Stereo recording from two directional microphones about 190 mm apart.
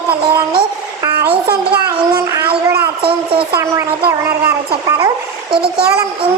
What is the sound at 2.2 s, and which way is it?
Speech, 20° right (ahead or behind).